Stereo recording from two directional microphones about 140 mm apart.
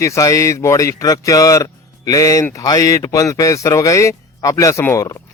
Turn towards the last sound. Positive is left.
turn(degrees=20)  # may be behind; listen again after turning